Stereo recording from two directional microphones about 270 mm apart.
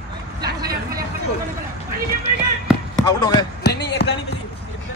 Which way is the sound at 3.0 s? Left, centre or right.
Centre.